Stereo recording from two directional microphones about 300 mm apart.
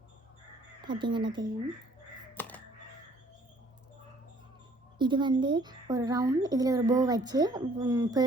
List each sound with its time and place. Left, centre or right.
0.8 s speech: centre
2.3 s music: centre
4.9 s speech: centre